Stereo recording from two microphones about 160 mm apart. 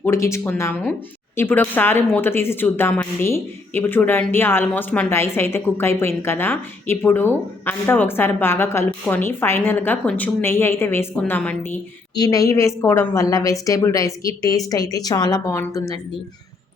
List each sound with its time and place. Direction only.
0.0 s a woman's voice: 15° left (ahead or behind)
12.1 s a woman's voice: 25° left (ahead or behind)